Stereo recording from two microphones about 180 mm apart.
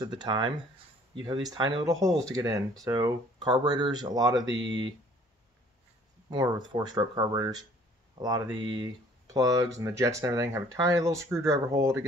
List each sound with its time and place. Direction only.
0.0 s speech: 25° right (ahead or behind)
4.5 s speech: 90° right
6.3 s speech: 25° right (ahead or behind)